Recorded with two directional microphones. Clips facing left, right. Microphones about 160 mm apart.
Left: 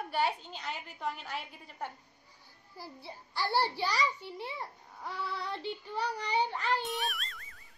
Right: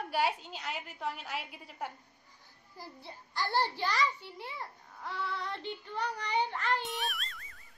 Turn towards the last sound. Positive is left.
turn(degrees=0)  # may be behind; listen again after turning